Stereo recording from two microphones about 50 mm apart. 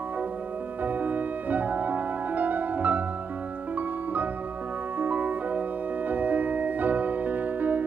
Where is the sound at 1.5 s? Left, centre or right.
Right.